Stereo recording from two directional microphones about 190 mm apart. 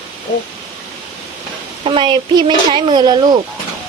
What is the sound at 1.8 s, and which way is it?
Speech, 25° right (ahead or behind).